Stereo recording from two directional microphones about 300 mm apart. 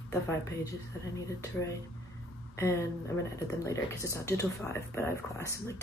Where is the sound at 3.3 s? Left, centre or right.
Centre.